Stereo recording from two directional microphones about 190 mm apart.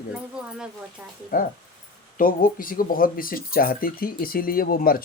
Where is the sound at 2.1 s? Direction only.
45° left (ahead or behind).